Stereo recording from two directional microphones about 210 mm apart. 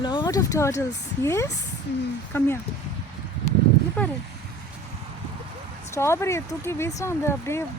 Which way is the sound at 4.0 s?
5° left (ahead or behind).